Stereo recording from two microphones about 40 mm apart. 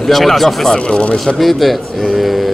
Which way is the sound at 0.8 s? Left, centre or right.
Left.